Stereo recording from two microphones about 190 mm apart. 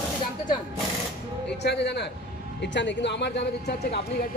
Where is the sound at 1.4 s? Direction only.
60° left (ahead or behind).